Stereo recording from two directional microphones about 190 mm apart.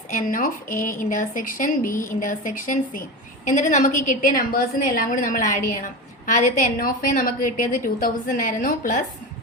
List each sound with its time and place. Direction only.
0.1 s a woman's voice: 45° left (ahead or behind)